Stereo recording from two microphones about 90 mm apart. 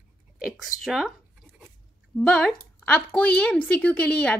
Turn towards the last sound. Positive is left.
turn(degrees=10)  # may be behind; listen again after turning